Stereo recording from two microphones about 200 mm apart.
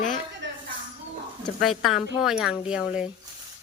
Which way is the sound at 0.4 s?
60° right (ahead or behind).